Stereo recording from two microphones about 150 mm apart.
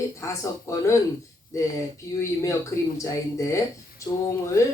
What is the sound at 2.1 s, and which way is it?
Speech, 20° left (ahead or behind).